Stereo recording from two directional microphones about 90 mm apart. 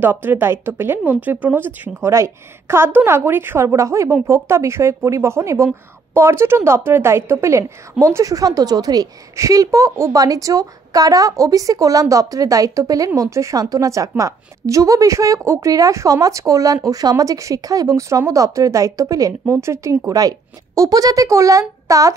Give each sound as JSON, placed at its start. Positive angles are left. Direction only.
{"t": 0.0, "sound": "a woman's voice", "side_deg": -20}